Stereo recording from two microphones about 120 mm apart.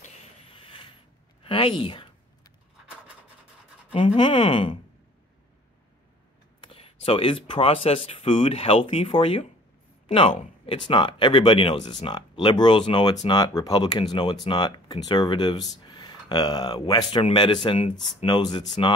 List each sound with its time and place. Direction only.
0.6 s mechanisms: 45° left (ahead or behind)
1.4 s speech: 50° left (ahead or behind)
3.9 s speech: 45° left (ahead or behind)
6.6 s speech: 50° left (ahead or behind)